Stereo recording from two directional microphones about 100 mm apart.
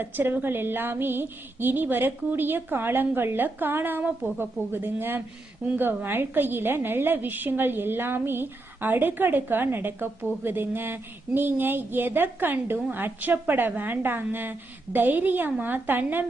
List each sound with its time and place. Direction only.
0.0 s a woman's voice: 20° right (ahead or behind)